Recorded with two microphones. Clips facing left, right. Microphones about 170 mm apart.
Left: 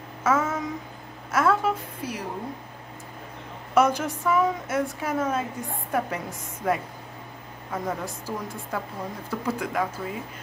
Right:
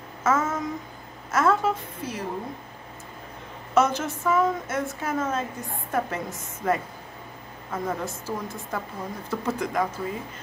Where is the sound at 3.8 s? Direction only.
10° left (ahead or behind).